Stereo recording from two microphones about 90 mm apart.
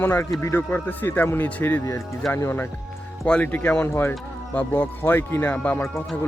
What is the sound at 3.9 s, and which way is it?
Speech, 30° left (ahead or behind).